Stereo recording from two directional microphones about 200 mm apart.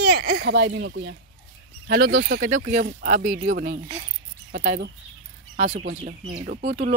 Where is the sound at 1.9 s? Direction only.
50° right (ahead or behind).